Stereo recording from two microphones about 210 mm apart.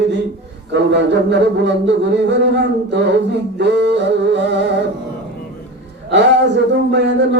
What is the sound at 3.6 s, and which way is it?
Speech, 55° right (ahead or behind).